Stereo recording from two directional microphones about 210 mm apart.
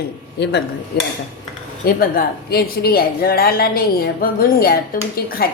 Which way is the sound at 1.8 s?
45° left (ahead or behind).